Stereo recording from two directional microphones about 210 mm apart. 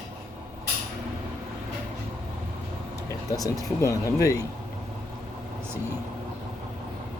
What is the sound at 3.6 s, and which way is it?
Speech, 15° left (ahead or behind).